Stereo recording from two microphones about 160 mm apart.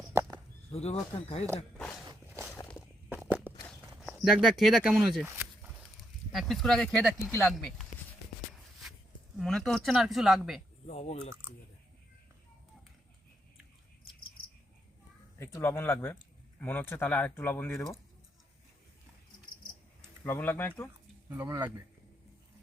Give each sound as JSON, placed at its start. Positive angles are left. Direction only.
{"t": 0.1, "sound": "a sound", "side_deg": -20}
{"t": 0.7, "sound": "speech", "side_deg": 40}
{"t": 3.2, "sound": "walk", "side_deg": -10}
{"t": 4.1, "sound": "a woman's voice", "side_deg": 0}
{"t": 5.2, "sound": "a sound", "side_deg": -15}
{"t": 6.0, "sound": "speech", "side_deg": 0}
{"t": 7.3, "sound": "speech", "side_deg": 15}
{"t": 9.4, "sound": "a woman's voice", "side_deg": 0}
{"t": 10.8, "sound": "speech", "side_deg": 40}
{"t": 15.4, "sound": "speech", "side_deg": 15}
{"t": 20.2, "sound": "speech", "side_deg": 10}
{"t": 21.2, "sound": "speech", "side_deg": -15}